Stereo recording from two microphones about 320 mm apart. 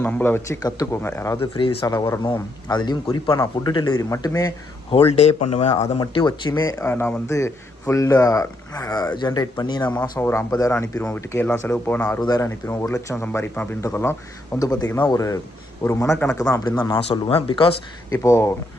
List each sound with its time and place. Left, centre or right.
0.0 s speech: centre
5.3 s speech: left
5.5 s speech: left